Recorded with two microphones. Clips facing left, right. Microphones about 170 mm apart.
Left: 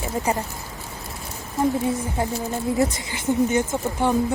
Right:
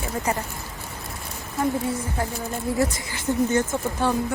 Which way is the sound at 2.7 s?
20° left (ahead or behind).